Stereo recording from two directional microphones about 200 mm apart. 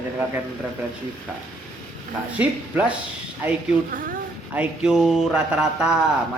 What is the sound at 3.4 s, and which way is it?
Speech, 10° right (ahead or behind).